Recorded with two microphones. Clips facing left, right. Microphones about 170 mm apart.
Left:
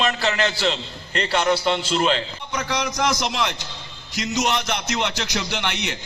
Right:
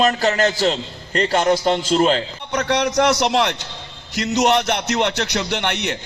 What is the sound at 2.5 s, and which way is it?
A man's voice, 65° right (ahead or behind).